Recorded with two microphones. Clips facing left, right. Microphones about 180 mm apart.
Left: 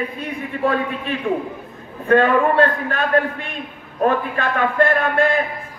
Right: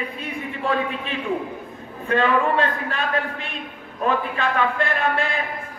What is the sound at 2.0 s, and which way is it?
A man's voice, 50° left (ahead or behind).